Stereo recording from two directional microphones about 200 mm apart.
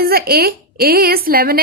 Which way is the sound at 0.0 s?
50° right (ahead or behind).